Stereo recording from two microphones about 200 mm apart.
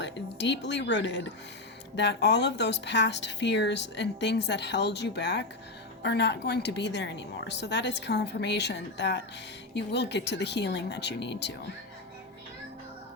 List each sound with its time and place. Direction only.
0.0 s speech: 60° left (ahead or behind)